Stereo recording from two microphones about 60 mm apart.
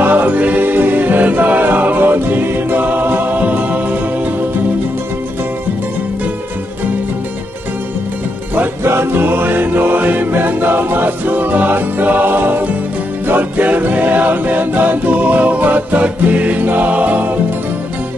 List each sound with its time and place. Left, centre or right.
0.0 s music: right
8.8 s music: right